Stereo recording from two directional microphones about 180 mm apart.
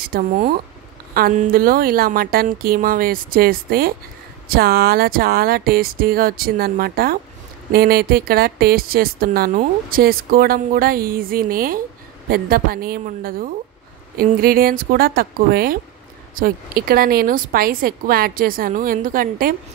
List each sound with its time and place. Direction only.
0.0 s a woman's voice: 55° right (ahead or behind)